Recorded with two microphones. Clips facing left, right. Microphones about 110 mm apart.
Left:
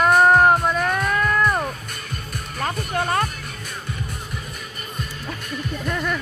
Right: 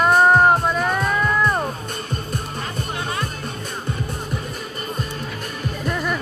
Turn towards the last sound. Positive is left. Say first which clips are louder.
# right 1 dB
turn(degrees=-5)  # may be behind; listen again after turning